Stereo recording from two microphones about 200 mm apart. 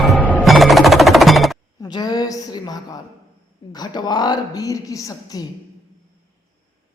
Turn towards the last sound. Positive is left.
turn(degrees=20)  # may be behind; listen again after turning